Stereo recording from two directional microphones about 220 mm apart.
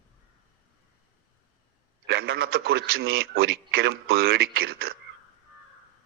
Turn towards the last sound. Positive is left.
turn(degrees=-45)  # may be behind; listen again after turning